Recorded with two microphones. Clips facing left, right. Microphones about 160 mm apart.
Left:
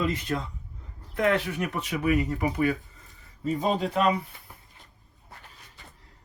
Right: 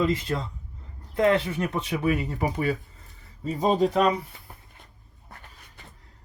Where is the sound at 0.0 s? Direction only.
30° right (ahead or behind).